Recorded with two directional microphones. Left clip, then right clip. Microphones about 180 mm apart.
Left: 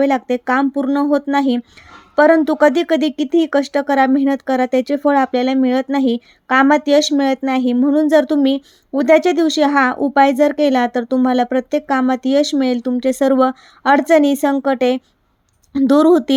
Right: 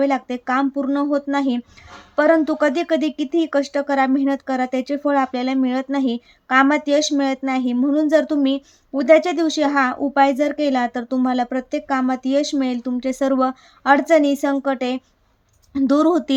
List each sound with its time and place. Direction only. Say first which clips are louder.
0.0 s speech: left 4 dB; 35° left (ahead or behind)